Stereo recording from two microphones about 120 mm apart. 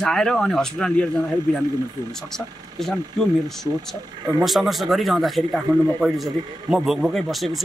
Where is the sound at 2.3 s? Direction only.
5° left (ahead or behind).